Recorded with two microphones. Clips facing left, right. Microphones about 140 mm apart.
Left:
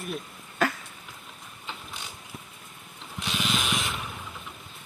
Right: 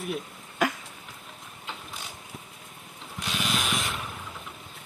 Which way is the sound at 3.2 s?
Centre (ahead or behind).